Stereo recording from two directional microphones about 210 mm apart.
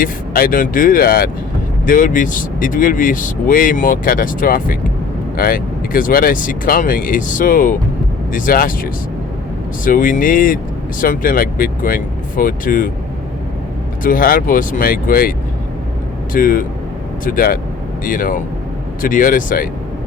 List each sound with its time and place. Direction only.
0.0 s speech: 45° left (ahead or behind)
14.0 s speech: 40° left (ahead or behind)